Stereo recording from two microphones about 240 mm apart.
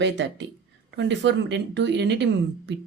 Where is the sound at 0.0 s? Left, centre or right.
Right.